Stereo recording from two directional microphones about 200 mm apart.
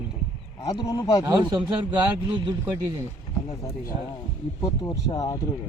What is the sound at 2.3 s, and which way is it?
Speech, 20° right (ahead or behind).